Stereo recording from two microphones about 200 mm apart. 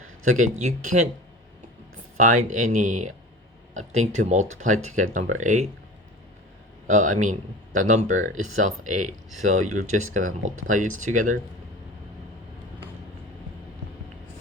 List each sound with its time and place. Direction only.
0.6 s speech: 35° right (ahead or behind)
2.1 s speech: 40° right (ahead or behind)
6.8 s speech: 40° right (ahead or behind)